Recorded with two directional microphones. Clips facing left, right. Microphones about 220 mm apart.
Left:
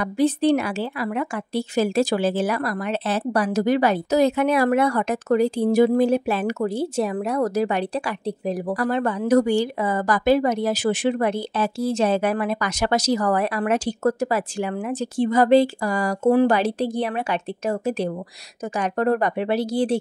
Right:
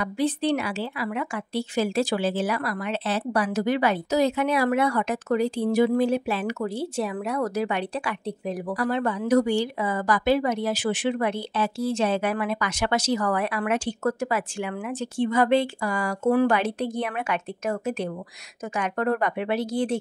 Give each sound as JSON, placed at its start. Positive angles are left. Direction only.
{"t": 0.0, "sound": "a woman's voice", "side_deg": 45}